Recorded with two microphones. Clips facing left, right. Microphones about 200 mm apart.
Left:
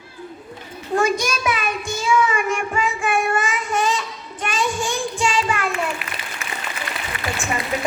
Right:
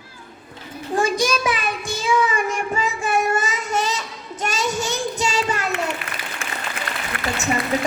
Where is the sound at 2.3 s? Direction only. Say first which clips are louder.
Left 1 dB; 40° right (ahead or behind).